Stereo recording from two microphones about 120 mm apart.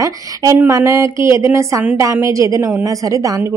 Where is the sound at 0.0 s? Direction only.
30° right (ahead or behind).